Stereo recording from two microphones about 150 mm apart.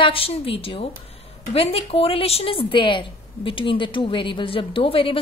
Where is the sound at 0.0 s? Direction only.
40° left (ahead or behind).